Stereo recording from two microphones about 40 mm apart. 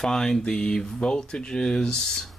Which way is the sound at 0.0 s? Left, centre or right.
Centre.